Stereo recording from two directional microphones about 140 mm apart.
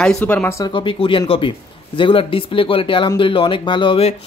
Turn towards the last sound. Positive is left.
turn(degrees=35)  # may be behind; listen again after turning